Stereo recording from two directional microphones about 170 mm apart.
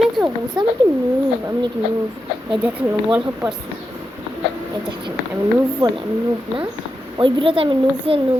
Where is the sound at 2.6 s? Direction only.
5° right (ahead or behind).